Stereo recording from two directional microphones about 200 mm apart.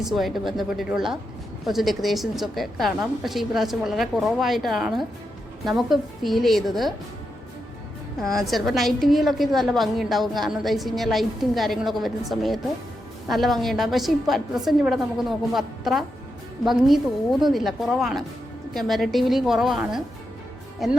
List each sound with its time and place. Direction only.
0.0 s a woman's voice: centre (ahead or behind)
8.2 s a woman's voice: centre (ahead or behind)